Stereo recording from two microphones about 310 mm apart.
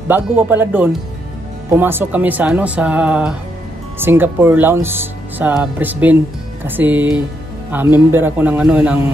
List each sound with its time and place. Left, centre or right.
0.1 s speech: centre